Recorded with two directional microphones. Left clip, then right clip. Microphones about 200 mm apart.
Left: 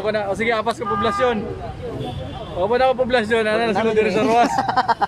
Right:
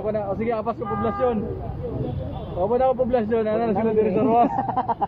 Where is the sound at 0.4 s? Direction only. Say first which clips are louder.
Left 5 dB; 20° left (ahead or behind).